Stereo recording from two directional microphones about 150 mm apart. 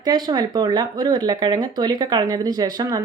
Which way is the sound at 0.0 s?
25° right (ahead or behind).